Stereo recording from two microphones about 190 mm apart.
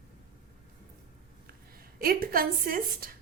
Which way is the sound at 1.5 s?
50° right (ahead or behind).